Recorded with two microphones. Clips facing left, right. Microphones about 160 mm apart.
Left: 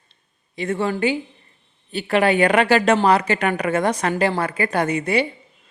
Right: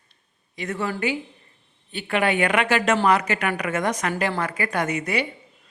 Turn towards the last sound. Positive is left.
turn(degrees=30)  # may be behind; listen again after turning